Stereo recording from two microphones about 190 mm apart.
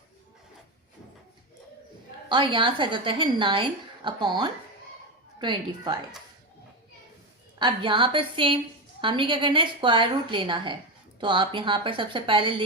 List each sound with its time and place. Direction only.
2.3 s a woman's voice: 25° right (ahead or behind)
7.6 s a woman's voice: 25° right (ahead or behind)